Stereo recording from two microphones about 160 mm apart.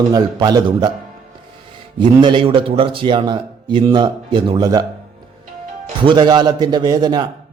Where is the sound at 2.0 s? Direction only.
30° right (ahead or behind).